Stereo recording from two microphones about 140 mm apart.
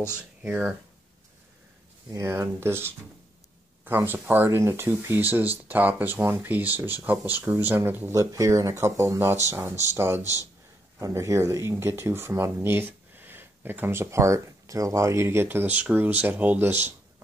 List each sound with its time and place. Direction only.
0.1 s speech: 10° right (ahead or behind)
2.0 s speech: 20° right (ahead or behind)